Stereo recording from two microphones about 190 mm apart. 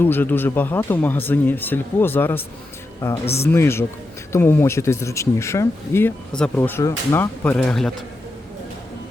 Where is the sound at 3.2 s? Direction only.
35° left (ahead or behind).